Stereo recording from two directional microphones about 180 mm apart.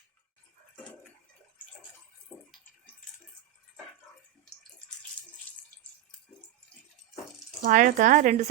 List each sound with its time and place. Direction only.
2.3 s bathtub: 5° left (ahead or behind)
5.5 s water: 10° left (ahead or behind)
7.6 s speech: 45° right (ahead or behind)